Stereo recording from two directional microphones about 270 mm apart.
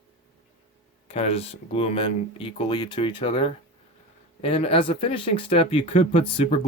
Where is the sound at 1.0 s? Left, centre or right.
Left.